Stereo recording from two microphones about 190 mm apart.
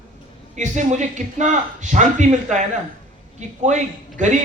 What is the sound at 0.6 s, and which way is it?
A man's voice, 40° right (ahead or behind).